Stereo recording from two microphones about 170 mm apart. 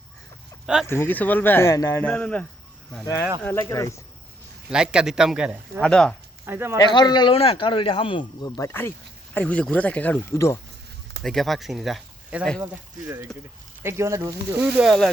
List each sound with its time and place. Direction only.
0.9 s speech: 10° left (ahead or behind)
4.7 s speech: 5° right (ahead or behind)
5.8 s speech: 5° left (ahead or behind)
6.4 s speech: 15° right (ahead or behind)
6.8 s a man's voice: 25° left (ahead or behind)
11.2 s speech: centre (ahead or behind)
12.6 s speech: 15° right (ahead or behind)
14.8 s speech: centre (ahead or behind)